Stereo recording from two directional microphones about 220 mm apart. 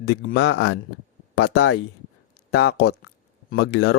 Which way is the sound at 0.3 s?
50° left (ahead or behind).